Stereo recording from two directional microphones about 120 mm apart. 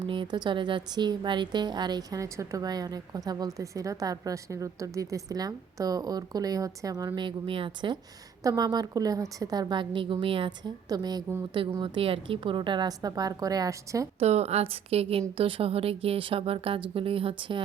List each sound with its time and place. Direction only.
0.1 s a woman's voice: 40° right (ahead or behind)
7.2 s a woman's voice: 45° right (ahead or behind)
10.8 s a woman's voice: 35° right (ahead or behind)
11.8 s a woman's voice: 50° right (ahead or behind); by 14.1 s 30° right (ahead or behind)
14.2 s a woman's voice: 65° right (ahead or behind)